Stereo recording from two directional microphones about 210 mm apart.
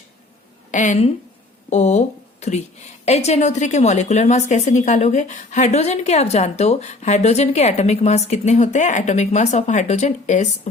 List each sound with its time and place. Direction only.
0.7 s a woman's voice: 35° left (ahead or behind)